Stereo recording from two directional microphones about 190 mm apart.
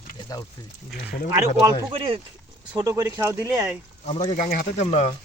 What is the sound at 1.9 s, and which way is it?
Speech, 25° right (ahead or behind).